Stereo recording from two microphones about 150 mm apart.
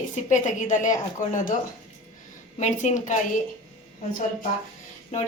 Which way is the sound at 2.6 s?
55° left (ahead or behind).